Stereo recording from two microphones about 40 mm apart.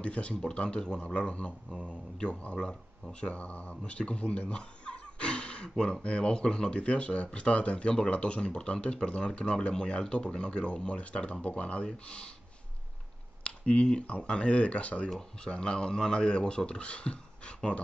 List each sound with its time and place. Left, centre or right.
0.0 s speech: left
0.3 s speech: centre
13.4 s a sound: left
14.2 s speech: left